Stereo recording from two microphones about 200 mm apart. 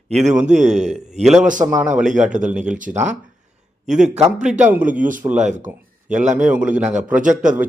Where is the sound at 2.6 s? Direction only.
40° right (ahead or behind).